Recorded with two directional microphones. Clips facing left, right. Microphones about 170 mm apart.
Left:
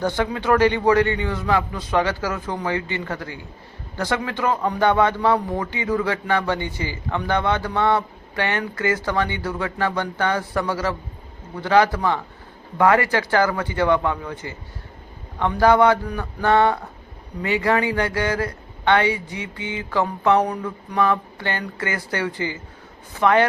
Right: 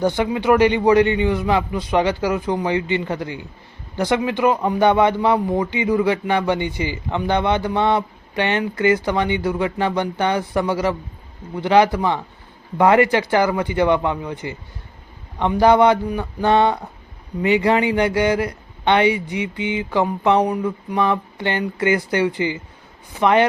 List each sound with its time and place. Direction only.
0.2 s a man's voice: 15° right (ahead or behind)